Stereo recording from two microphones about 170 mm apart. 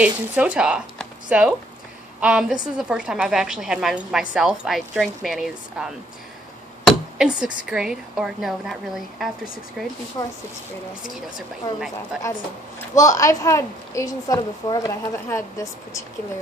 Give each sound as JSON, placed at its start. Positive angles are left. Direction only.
{"t": 0.0, "sound": "a woman's voice", "side_deg": -5}
{"t": 6.9, "sound": "speech", "side_deg": -5}
{"t": 10.2, "sound": "a woman's voice", "side_deg": 20}
{"t": 11.6, "sound": "a woman's voice", "side_deg": 20}
{"t": 12.9, "sound": "a woman's voice", "side_deg": 20}